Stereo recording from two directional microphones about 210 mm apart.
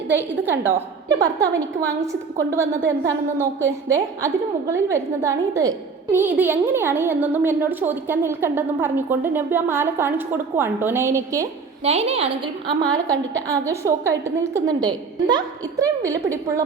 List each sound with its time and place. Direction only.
0.1 s a woman's voice: 10° right (ahead or behind)
11.8 s a woman's voice: 30° right (ahead or behind)
13.1 s a woman's voice: 15° right (ahead or behind)